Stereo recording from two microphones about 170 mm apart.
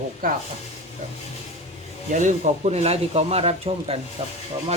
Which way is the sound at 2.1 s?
45° right (ahead or behind).